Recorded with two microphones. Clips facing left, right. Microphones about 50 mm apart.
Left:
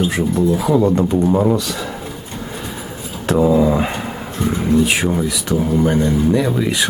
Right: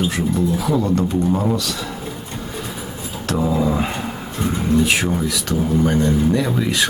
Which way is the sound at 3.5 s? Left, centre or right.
Centre.